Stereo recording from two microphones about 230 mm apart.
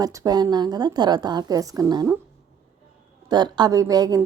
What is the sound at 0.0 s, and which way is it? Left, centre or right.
A woman's voice, centre.